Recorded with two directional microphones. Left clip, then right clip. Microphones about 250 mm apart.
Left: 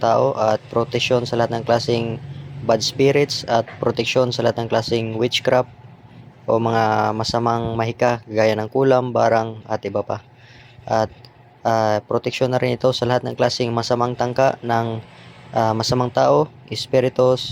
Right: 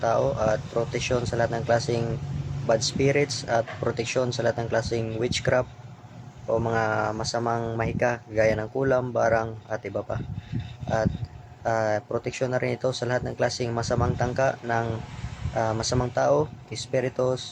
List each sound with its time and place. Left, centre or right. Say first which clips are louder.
0.0 s speech: left 7 dB; centre